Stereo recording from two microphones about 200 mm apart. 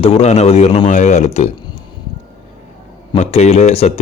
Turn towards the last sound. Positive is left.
turn(degrees=35)  # may be behind; listen again after turning